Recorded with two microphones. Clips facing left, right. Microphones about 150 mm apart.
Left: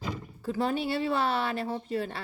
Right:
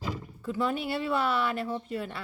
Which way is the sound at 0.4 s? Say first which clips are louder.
Left 1 dB; 35° left (ahead or behind).